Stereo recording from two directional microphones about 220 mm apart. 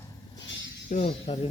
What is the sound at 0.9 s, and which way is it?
Speech, 30° left (ahead or behind).